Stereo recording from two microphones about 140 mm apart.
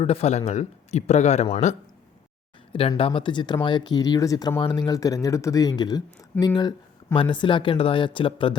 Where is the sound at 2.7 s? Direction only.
45° left (ahead or behind).